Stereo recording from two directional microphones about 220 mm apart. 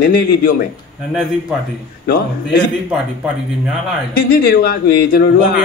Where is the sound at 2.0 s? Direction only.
40° left (ahead or behind).